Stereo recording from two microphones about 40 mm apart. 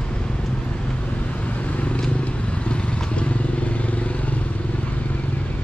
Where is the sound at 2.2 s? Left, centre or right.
Left.